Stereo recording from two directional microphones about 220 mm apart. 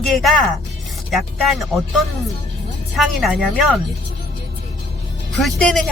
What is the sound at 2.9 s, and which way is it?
Speech, centre (ahead or behind).